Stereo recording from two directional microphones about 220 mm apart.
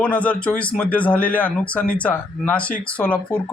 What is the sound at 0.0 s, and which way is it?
Speech, 5° left (ahead or behind).